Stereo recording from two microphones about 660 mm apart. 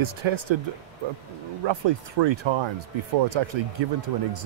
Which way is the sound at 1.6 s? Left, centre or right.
Right.